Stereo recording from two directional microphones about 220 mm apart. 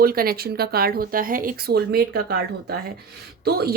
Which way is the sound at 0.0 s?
45° right (ahead or behind).